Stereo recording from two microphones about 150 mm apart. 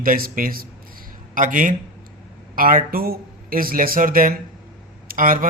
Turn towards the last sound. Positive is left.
turn(degrees=-70)  # may be behind; listen again after turning